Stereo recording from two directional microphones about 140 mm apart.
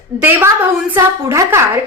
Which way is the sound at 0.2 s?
15° right (ahead or behind).